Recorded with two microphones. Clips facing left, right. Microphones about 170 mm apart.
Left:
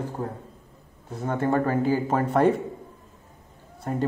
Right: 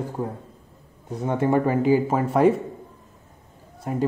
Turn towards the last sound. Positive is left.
turn(degrees=-5)  # may be behind; listen again after turning